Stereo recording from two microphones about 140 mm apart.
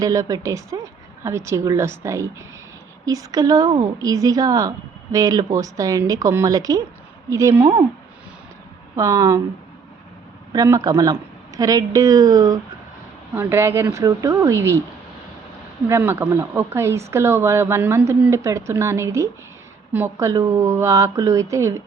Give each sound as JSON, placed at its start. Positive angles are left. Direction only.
{"t": 0.0, "sound": "speech", "side_deg": -25}
{"t": 9.0, "sound": "speech", "side_deg": -25}
{"t": 10.5, "sound": "speech", "side_deg": -25}
{"t": 15.9, "sound": "speech", "side_deg": -15}